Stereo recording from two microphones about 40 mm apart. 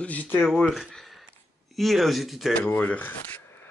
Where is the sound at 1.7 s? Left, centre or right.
Centre.